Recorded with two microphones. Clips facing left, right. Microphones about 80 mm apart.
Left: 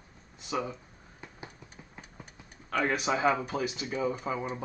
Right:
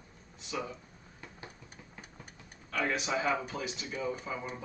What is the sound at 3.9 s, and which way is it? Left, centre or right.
Speech, left.